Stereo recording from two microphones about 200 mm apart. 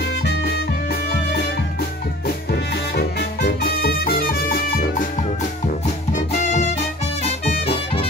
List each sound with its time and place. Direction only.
0.0 s music: 55° left (ahead or behind)
2.7 s music: 55° left (ahead or behind)
6.3 s music: 35° left (ahead or behind)